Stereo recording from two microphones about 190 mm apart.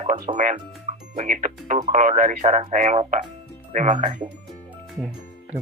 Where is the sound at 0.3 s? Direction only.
40° right (ahead or behind).